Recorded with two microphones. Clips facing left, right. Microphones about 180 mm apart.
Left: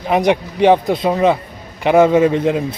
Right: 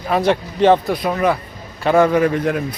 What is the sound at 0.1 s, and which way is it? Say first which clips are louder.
Speech: left 2 dB; 15° left (ahead or behind).